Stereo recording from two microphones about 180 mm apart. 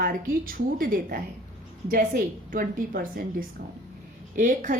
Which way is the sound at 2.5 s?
50° right (ahead or behind).